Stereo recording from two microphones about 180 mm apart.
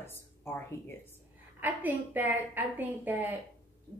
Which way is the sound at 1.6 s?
10° right (ahead or behind).